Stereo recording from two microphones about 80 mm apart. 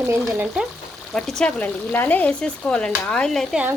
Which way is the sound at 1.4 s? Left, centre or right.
Centre.